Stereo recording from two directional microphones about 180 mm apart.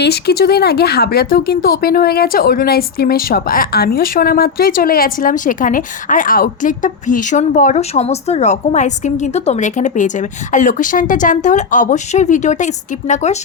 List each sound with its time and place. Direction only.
0.0 s speech: 65° left (ahead or behind); by 13.4 s 40° left (ahead or behind)